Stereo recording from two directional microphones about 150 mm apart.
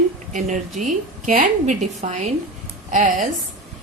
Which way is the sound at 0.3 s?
55° right (ahead or behind).